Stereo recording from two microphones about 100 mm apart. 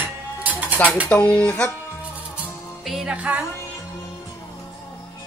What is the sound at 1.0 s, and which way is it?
Speech, 10° left (ahead or behind).